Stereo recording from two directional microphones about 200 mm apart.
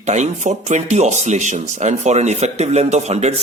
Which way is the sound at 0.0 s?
35° right (ahead or behind).